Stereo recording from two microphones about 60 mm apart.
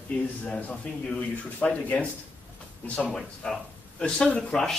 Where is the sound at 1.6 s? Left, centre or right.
Left.